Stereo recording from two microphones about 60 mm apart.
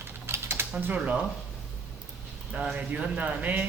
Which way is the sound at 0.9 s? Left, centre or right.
Right.